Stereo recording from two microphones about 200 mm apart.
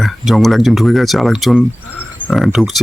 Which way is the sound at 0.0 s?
Centre (ahead or behind).